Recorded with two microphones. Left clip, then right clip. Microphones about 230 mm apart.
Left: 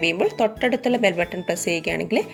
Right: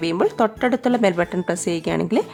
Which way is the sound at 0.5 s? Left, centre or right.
Right.